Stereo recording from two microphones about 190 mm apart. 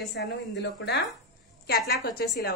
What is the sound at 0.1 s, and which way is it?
Speech, 65° left (ahead or behind).